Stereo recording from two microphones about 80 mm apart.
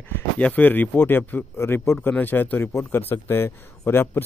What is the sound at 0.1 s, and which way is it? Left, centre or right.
A man's voice, centre.